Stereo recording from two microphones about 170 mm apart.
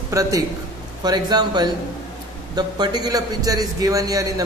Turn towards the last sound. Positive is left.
turn(degrees=-20)  # may be behind; listen again after turning